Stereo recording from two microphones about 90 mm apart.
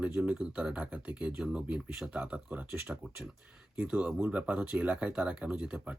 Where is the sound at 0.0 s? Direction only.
10° right (ahead or behind).